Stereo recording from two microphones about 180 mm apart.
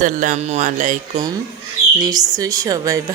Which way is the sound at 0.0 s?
45° right (ahead or behind).